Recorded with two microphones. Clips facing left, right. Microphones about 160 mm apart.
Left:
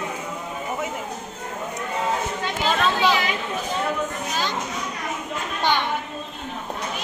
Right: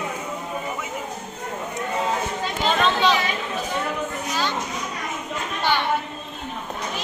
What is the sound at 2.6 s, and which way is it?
Speech, 10° left (ahead or behind).